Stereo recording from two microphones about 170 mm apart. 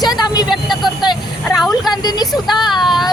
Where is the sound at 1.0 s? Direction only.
25° left (ahead or behind).